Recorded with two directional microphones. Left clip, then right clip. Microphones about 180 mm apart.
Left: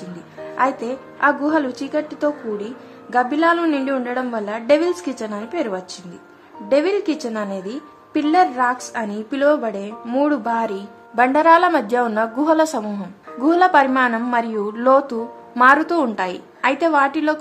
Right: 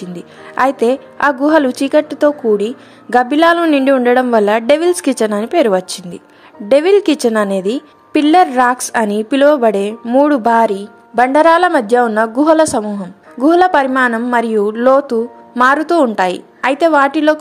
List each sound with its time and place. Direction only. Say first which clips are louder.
0.6 s a woman's voice: right 8 dB; 50° right (ahead or behind)